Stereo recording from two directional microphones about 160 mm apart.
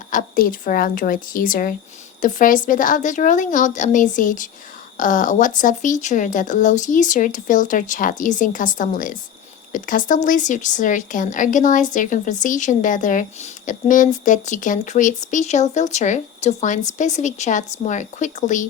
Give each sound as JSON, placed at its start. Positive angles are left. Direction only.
{"t": 0.1, "sound": "a woman's voice", "side_deg": 60}